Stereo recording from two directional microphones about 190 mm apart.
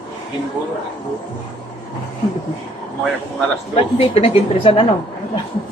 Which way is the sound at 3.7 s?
30° left (ahead or behind).